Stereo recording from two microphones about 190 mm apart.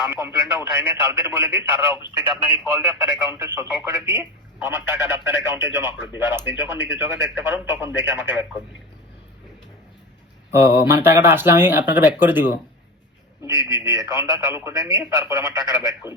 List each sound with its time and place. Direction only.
0.0 s speech: 10° right (ahead or behind)
11.0 s speech: 15° right (ahead or behind)